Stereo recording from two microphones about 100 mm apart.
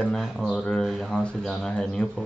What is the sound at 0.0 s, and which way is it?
Speech, 5° left (ahead or behind).